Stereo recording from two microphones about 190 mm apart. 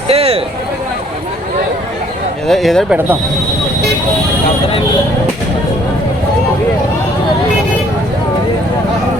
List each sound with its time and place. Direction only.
0.1 s speech: 30° right (ahead or behind)
2.5 s speech: centre (ahead or behind)